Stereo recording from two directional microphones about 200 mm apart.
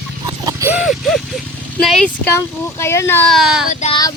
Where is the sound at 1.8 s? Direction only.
5° left (ahead or behind).